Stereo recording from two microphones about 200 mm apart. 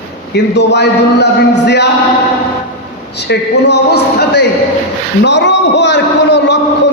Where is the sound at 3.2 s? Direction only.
55° left (ahead or behind).